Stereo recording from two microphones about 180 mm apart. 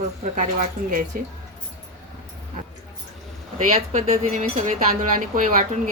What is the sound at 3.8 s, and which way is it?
Speech, 35° right (ahead or behind).